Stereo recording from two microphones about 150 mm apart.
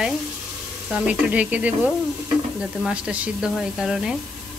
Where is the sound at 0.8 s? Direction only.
10° right (ahead or behind).